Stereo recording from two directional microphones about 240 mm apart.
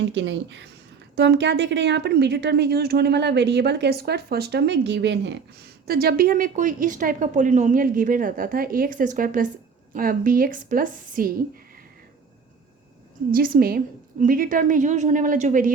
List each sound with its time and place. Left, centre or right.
0.0 s a woman's voice: right
13.3 s a woman's voice: right